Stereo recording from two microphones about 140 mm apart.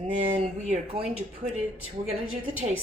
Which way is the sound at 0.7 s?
50° right (ahead or behind).